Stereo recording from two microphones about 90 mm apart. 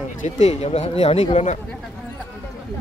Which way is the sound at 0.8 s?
90° left.